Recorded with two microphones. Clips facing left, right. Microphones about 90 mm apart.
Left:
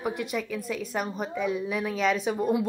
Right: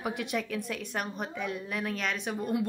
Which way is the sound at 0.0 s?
Centre (ahead or behind).